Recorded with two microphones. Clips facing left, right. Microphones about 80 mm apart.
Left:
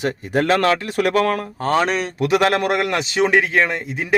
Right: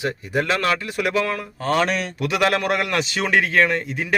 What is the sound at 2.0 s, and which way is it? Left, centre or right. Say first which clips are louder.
A man's voice: left 4 dB; left.